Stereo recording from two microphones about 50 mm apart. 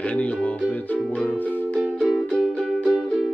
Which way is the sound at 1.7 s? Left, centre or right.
Centre.